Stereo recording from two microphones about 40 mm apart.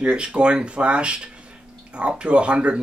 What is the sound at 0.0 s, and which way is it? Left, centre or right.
Speech, right.